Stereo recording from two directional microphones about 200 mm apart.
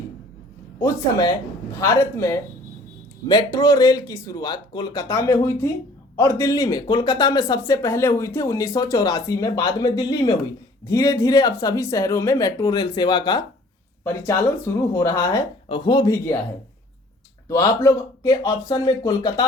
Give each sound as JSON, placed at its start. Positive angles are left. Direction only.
{"t": 0.8, "sound": "speech", "side_deg": 15}
{"t": 17.5, "sound": "speech", "side_deg": 15}